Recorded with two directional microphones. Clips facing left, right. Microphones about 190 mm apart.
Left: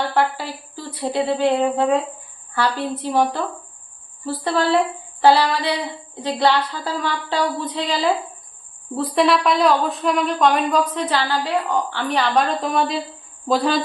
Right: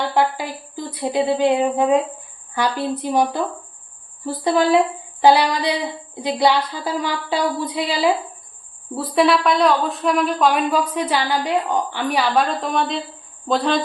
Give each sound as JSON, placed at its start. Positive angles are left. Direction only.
{"t": 0.1, "sound": "a sound", "side_deg": -15}
{"t": 0.9, "sound": "a woman's voice", "side_deg": -15}
{"t": 9.0, "sound": "speech", "side_deg": 0}